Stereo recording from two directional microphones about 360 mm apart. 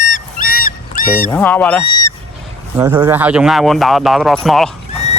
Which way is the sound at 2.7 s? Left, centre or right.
Centre.